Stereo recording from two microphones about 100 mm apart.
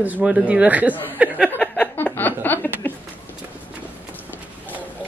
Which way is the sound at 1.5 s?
20° left (ahead or behind).